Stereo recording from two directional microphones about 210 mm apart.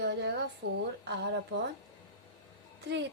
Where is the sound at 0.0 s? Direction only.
55° right (ahead or behind).